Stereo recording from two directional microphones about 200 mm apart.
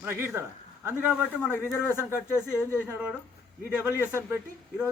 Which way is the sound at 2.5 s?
10° left (ahead or behind).